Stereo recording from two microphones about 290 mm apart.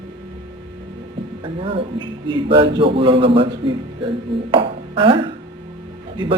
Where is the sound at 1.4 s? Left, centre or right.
Centre.